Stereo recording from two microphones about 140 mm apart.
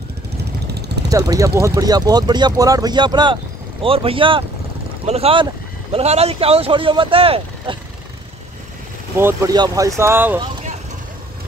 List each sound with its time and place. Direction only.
1.1 s speech: 25° right (ahead or behind); by 7.7 s 40° right (ahead or behind)
9.2 s speech: 20° right (ahead or behind)